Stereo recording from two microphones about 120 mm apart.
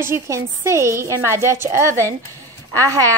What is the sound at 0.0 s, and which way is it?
Speech, 20° right (ahead or behind).